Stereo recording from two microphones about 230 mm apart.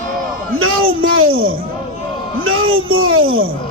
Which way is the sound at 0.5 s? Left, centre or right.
Right.